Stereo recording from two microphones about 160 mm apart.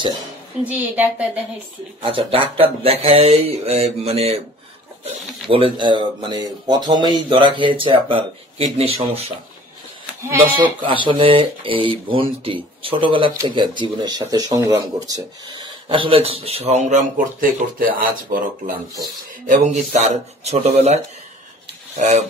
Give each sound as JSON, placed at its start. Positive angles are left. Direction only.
{"t": 0.7, "sound": "a woman's voice", "side_deg": -10}
{"t": 2.0, "sound": "speech", "side_deg": -35}
{"t": 10.9, "sound": "speech", "side_deg": -35}
{"t": 19.4, "sound": "speech", "side_deg": -50}